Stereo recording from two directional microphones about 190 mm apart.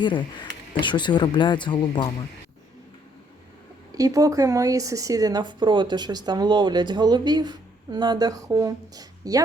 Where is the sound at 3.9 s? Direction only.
20° right (ahead or behind).